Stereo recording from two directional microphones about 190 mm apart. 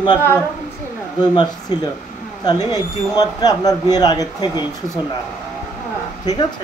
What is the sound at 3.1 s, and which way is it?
A man's voice, 20° left (ahead or behind).